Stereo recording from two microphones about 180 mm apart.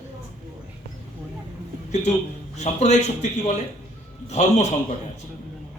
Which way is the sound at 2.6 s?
40° left (ahead or behind).